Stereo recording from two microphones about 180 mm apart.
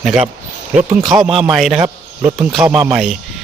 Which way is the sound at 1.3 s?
30° right (ahead or behind).